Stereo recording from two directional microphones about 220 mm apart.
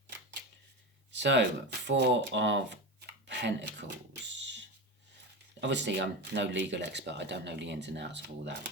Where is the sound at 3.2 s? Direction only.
50° right (ahead or behind).